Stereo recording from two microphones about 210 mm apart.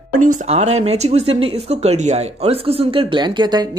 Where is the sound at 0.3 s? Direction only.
30° right (ahead or behind).